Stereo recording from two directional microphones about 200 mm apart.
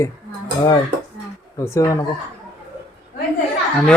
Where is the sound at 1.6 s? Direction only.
15° left (ahead or behind).